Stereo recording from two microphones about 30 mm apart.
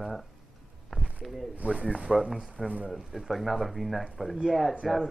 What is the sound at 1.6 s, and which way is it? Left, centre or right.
Speech, right.